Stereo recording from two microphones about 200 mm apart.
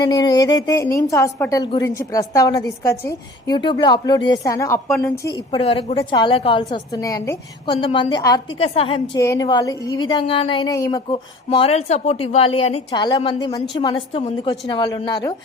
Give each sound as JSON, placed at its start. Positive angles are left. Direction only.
{"t": 0.0, "sound": "a woman's voice", "side_deg": 20}